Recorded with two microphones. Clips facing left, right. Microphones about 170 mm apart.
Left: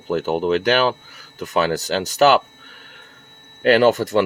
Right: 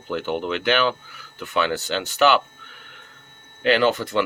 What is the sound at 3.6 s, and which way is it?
Speech, 45° left (ahead or behind).